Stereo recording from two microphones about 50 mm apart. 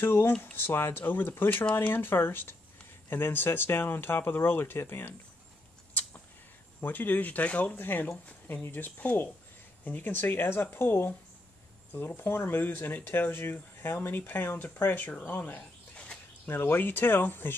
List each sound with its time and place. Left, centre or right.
0.0 s speech: left
6.8 s speech: left
16.4 s speech: left